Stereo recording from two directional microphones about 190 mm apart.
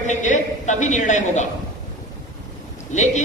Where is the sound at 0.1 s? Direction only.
40° left (ahead or behind).